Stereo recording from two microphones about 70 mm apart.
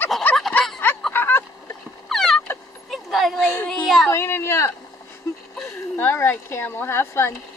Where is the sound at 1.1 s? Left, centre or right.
Left.